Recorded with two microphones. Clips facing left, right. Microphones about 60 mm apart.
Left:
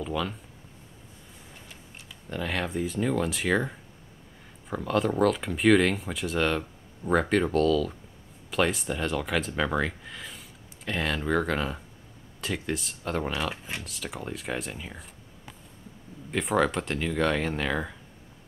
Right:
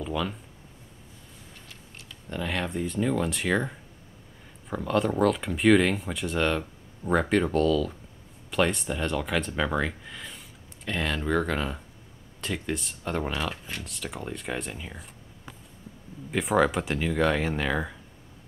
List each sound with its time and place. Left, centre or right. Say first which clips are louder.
0.0 s speech: even; centre
1.7 s speech: even; centre
16.3 s speech: right 2 dB; centre